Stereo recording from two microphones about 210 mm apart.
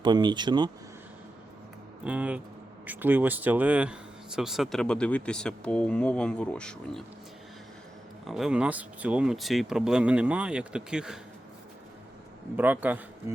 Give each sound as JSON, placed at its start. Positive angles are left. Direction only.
{"t": 0.0, "sound": "speech", "side_deg": -20}
{"t": 2.0, "sound": "speech", "side_deg": -5}
{"t": 8.3, "sound": "speech", "side_deg": 0}
{"t": 12.5, "sound": "a man's voice", "side_deg": -10}